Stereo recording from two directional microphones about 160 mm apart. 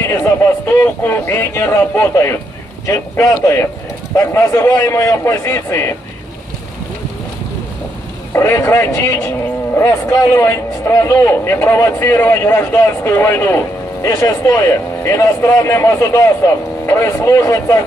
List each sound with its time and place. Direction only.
0.0 s a man's voice: 15° left (ahead or behind)
8.3 s a man's voice: 15° left (ahead or behind)